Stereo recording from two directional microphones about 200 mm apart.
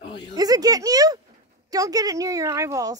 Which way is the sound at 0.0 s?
25° left (ahead or behind).